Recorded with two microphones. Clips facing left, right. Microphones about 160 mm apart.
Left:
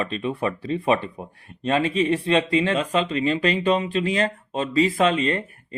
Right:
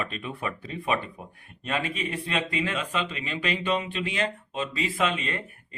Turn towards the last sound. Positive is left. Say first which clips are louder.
# left 9 dB
turn(degrees=35)  # may be behind; listen again after turning